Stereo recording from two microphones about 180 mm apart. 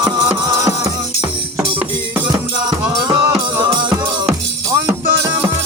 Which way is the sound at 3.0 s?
25° right (ahead or behind).